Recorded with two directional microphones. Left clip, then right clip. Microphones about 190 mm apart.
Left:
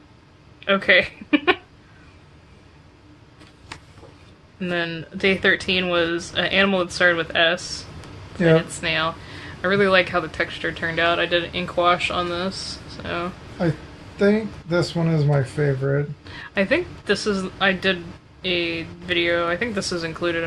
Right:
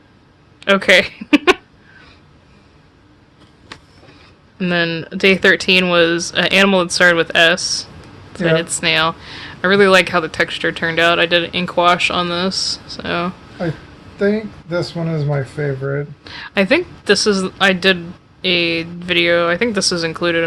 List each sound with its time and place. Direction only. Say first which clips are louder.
0.6 s speech: right 5 dB; 50° right (ahead or behind)
4.6 s speech: right 8 dB; 55° right (ahead or behind)
14.2 s speech: right 2 dB; centre (ahead or behind)
16.2 s speech: right 6 dB; 50° right (ahead or behind)